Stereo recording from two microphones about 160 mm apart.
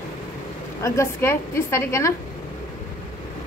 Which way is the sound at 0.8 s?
15° left (ahead or behind).